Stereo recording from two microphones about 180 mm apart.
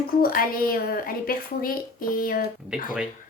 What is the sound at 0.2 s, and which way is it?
A woman's voice, 55° left (ahead or behind).